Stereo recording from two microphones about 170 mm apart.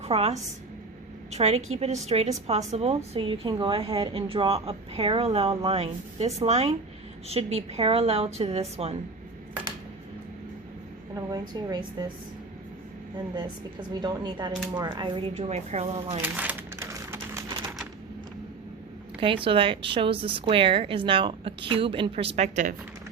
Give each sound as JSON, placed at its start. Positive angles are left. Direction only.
{"t": 0.0, "sound": "a woman's voice", "side_deg": -40}
{"t": 11.1, "sound": "a woman's voice", "side_deg": -25}
{"t": 14.0, "sound": "a woman's voice", "side_deg": -25}
{"t": 16.2, "sound": "crumpling", "side_deg": -10}
{"t": 19.2, "sound": "a woman's voice", "side_deg": -30}